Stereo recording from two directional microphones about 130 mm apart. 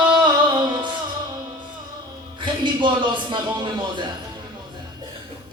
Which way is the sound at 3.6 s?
35° right (ahead or behind).